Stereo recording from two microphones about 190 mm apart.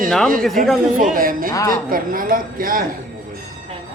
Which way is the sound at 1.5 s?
15° left (ahead or behind).